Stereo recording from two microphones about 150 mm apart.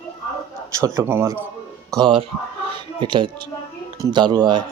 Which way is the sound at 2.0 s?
35° right (ahead or behind).